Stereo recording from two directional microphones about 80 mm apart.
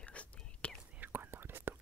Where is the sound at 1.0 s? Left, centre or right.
Right.